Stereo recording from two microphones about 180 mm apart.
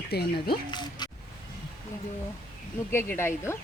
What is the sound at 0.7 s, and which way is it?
Speech, 25° left (ahead or behind).